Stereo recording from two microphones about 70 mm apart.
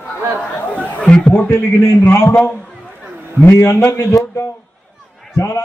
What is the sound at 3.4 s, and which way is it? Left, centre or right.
A man's voice, left.